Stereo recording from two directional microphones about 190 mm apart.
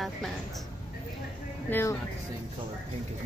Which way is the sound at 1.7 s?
10° left (ahead or behind).